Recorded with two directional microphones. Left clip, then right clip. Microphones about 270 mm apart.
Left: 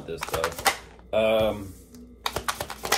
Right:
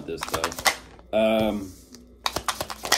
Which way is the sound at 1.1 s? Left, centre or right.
Centre.